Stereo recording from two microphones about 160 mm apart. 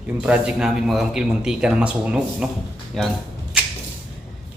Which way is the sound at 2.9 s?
5° left (ahead or behind).